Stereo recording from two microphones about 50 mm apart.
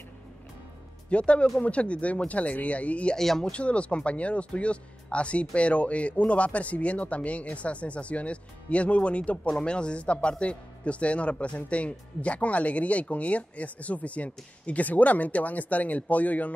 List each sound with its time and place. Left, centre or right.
1.1 s speech: left
3.2 s speech: centre
3.5 s speech: left